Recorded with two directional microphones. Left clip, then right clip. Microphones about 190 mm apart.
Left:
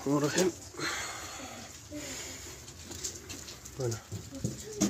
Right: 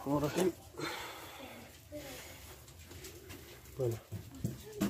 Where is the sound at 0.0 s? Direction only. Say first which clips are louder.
Left 4 dB; 10° left (ahead or behind).